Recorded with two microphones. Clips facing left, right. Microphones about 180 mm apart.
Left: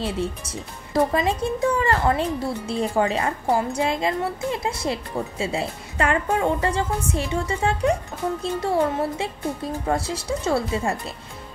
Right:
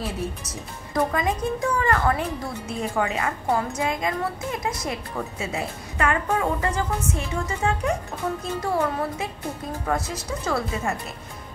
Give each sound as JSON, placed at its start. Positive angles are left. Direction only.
{"t": 0.0, "sound": "a woman's voice", "side_deg": 30}